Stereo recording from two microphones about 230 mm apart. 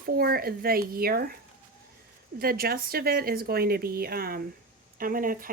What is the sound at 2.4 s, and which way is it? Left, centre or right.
Speech, right.